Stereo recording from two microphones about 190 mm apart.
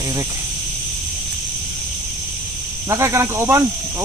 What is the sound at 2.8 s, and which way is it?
Speech, 15° right (ahead or behind).